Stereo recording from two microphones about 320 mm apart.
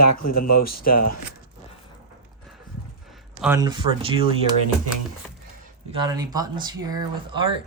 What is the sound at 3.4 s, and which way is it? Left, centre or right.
Speech, centre.